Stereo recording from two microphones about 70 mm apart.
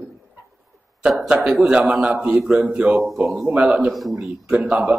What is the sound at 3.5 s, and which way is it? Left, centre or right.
Speech, centre.